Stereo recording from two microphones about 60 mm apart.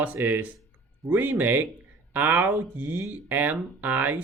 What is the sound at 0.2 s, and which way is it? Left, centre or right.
Speech, right.